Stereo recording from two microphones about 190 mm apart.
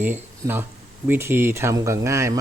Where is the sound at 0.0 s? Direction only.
10° right (ahead or behind).